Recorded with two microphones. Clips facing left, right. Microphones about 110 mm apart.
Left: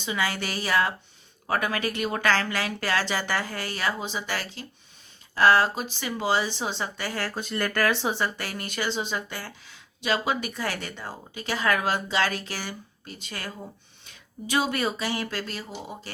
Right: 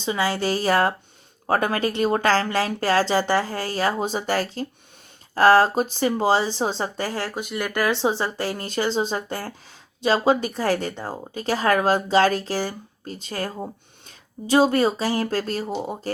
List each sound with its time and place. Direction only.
0.0 s speech: 30° right (ahead or behind)
7.3 s speech: 15° right (ahead or behind); by 15.7 s 40° right (ahead or behind)